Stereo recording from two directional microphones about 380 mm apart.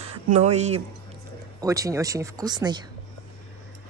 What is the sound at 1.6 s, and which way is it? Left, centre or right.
Speech, centre.